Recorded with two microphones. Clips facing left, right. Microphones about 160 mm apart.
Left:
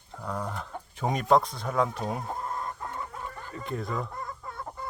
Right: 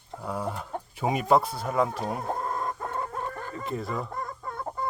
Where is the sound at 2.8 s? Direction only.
55° right (ahead or behind).